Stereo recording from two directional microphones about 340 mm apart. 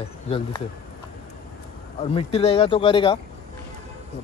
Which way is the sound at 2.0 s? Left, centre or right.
Centre.